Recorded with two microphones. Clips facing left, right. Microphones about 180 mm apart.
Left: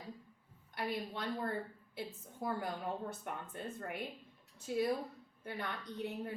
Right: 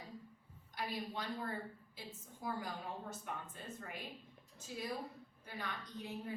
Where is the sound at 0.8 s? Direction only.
60° left (ahead or behind).